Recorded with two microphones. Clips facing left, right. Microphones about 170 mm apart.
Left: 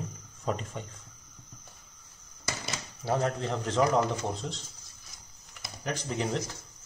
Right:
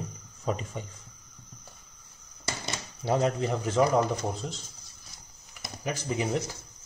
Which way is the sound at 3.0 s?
15° right (ahead or behind).